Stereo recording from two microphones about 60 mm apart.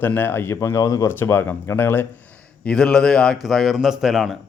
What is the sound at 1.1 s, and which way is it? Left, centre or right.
Speech, left.